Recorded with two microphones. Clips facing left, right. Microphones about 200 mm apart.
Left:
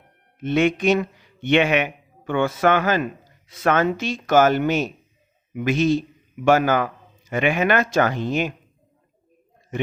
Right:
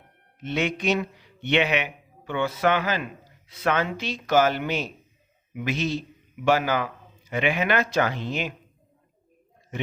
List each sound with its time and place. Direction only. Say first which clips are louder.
0.4 s a man's voice: left 7 dB; 50° left (ahead or behind)